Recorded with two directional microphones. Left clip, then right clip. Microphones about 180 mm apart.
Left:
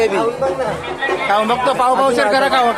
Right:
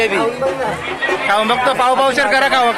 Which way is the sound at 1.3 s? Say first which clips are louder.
Right 1 dB; centre (ahead or behind).